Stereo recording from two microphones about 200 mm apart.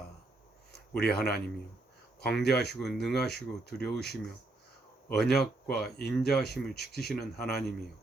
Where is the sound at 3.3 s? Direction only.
55° left (ahead or behind).